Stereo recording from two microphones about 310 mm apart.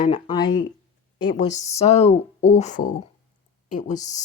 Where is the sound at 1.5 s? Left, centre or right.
Left.